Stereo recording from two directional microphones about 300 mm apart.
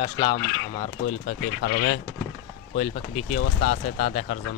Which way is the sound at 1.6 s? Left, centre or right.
Left.